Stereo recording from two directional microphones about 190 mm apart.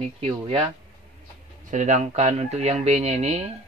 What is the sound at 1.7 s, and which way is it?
Speech, 40° right (ahead or behind).